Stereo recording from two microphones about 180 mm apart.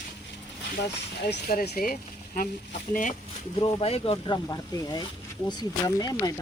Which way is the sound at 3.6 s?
35° left (ahead or behind).